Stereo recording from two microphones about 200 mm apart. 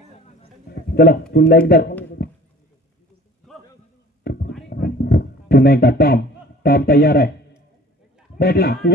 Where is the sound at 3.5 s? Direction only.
Centre (ahead or behind).